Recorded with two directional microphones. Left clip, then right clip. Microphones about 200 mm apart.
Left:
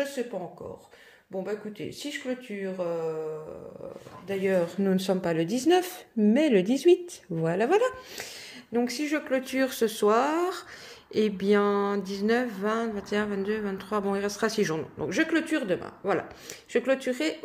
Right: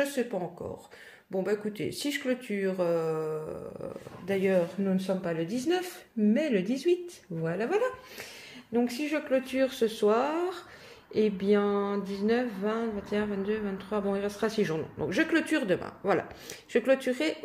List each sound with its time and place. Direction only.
0.0 s speech: 20° right (ahead or behind)
4.3 s speech: 15° right (ahead or behind)
4.8 s speech: 45° left (ahead or behind)
8.7 s a sound: 15° left (ahead or behind); by 16.3 s centre (ahead or behind)
16.7 s speech: 5° left (ahead or behind)